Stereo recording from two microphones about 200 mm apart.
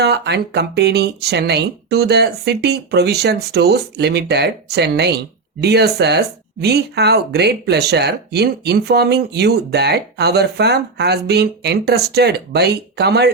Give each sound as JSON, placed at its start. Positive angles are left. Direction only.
{"t": 0.0, "sound": "speech", "side_deg": -55}